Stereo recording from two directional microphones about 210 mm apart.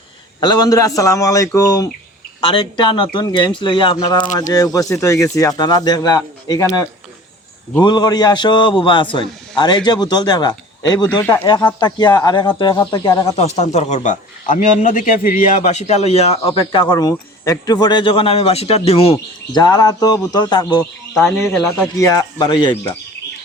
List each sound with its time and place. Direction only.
0.3 s a man's voice: 20° left (ahead or behind)
7.8 s a man's voice: 20° left (ahead or behind)
13.3 s a man's voice: 30° left (ahead or behind)
21.2 s speech: centre (ahead or behind)
21.9 s speech: 15° left (ahead or behind)